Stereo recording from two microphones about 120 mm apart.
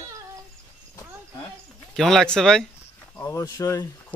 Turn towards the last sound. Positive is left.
turn(degrees=30)  # may be behind; listen again after turning